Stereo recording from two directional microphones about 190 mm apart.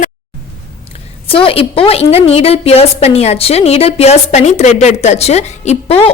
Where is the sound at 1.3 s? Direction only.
30° left (ahead or behind).